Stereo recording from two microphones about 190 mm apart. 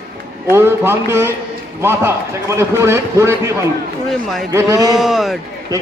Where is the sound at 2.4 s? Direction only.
15° right (ahead or behind).